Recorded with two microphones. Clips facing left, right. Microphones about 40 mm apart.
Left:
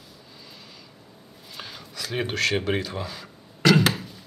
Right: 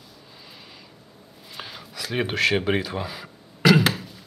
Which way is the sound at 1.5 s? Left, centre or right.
Centre.